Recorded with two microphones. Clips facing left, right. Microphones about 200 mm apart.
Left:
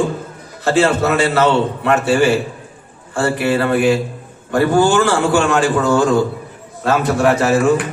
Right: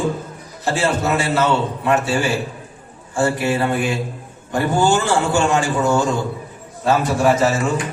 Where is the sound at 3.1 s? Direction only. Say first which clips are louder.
Left 2 dB; 60° left (ahead or behind).